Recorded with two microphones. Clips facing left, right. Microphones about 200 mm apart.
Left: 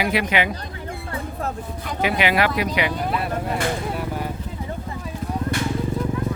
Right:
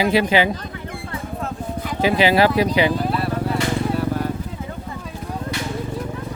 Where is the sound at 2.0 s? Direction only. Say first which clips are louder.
Right 4 dB; 30° right (ahead or behind).